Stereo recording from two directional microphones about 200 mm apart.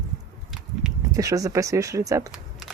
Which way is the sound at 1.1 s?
15° right (ahead or behind).